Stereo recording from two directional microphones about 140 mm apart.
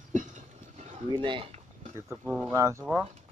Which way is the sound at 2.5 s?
20° right (ahead or behind).